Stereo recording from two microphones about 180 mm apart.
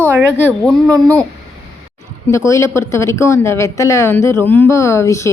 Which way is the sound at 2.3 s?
15° left (ahead or behind).